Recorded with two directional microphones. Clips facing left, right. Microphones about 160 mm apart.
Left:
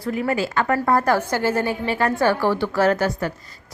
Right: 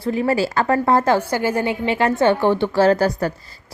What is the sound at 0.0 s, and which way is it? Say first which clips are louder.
A woman's voice: right 3 dB; 25° right (ahead or behind).